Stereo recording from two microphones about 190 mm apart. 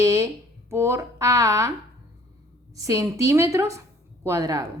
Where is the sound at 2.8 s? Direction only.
15° right (ahead or behind).